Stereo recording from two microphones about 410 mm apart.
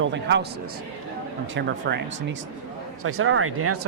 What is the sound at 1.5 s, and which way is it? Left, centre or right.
Speech, right.